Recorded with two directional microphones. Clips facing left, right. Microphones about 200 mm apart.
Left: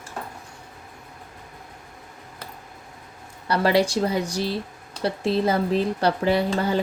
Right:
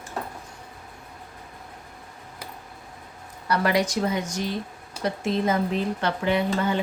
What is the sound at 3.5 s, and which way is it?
Speech, 30° left (ahead or behind).